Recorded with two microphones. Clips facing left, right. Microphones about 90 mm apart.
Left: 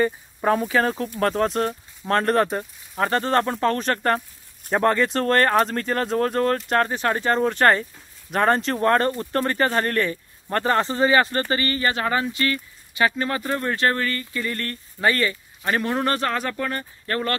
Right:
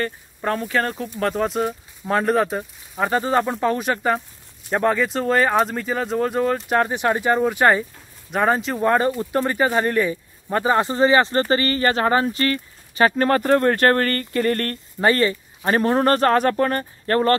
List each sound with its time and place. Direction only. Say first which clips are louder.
0.0 s speech: left 4 dB; 10° left (ahead or behind); by 11.0 s 10° right (ahead or behind)
11.0 s speech: right 3 dB; 25° right (ahead or behind); by 14.8 s 50° right (ahead or behind)
15.0 s speech: right 4 dB; 30° right (ahead or behind)